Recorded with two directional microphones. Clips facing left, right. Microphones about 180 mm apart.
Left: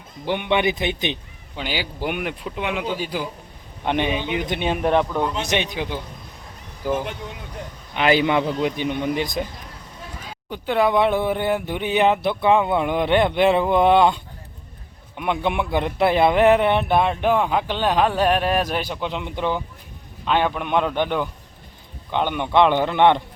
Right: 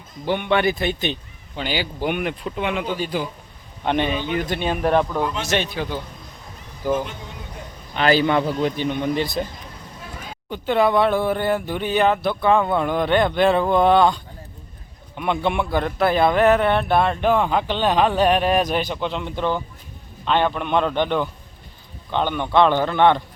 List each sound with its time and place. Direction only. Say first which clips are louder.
0.3 s speech: right 1 dB; 15° left (ahead or behind)
7.9 s speech: even; 15° left (ahead or behind)
10.5 s speech: right 1 dB; 10° left (ahead or behind)
15.1 s speech: right 1 dB; 10° left (ahead or behind)